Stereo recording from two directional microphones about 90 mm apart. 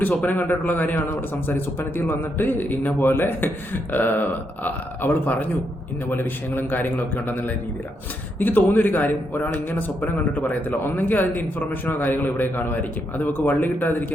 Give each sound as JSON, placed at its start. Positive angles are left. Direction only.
{"t": 0.0, "sound": "a man's voice", "side_deg": 15}